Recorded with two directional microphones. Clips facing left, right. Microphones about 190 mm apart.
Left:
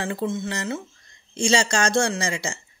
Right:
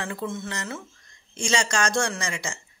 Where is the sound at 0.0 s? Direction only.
30° left (ahead or behind).